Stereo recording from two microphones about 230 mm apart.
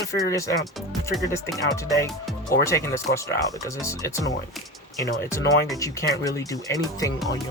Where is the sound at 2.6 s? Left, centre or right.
Centre.